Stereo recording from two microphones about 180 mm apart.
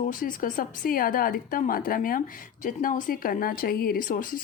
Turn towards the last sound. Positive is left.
turn(degrees=55)  # may be behind; listen again after turning